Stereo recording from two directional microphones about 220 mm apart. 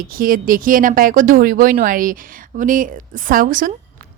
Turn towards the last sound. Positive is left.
turn(degrees=-40)  # may be behind; listen again after turning